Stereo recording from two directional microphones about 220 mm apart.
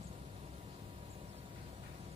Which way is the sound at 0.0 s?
30° right (ahead or behind).